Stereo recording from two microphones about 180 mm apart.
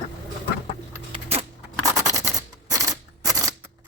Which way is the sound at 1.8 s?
15° right (ahead or behind).